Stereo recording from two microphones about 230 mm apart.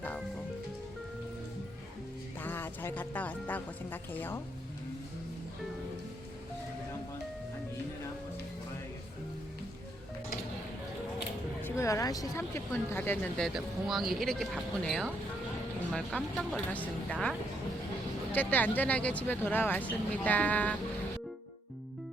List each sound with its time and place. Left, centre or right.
2.4 s speech: centre
11.6 s speech: centre